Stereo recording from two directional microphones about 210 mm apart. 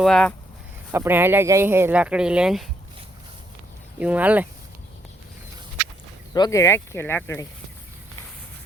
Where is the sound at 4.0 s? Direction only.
5° right (ahead or behind).